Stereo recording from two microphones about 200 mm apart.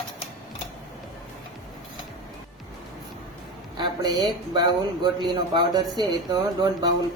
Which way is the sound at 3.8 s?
20° right (ahead or behind).